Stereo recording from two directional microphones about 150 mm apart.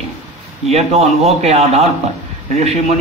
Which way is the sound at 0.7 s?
45° right (ahead or behind).